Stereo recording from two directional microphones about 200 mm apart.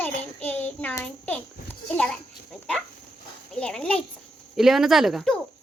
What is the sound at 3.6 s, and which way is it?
A child's voice, 5° left (ahead or behind).